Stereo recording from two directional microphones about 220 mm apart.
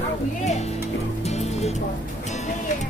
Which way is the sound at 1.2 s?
30° left (ahead or behind).